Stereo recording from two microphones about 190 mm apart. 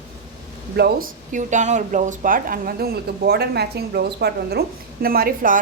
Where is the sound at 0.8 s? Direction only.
50° right (ahead or behind).